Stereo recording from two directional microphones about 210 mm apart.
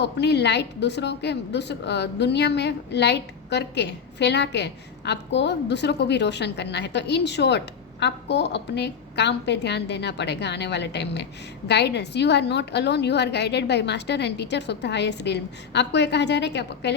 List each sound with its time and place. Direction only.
0.0 s a woman's voice: 55° left (ahead or behind)